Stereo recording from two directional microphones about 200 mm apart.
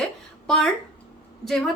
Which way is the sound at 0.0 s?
Centre (ahead or behind).